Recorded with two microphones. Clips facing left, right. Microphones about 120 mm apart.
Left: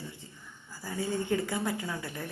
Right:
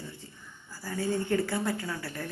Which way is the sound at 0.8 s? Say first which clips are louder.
Right 2 dB; 15° left (ahead or behind).